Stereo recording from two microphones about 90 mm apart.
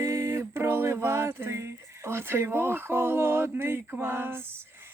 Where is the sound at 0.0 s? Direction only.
35° right (ahead or behind).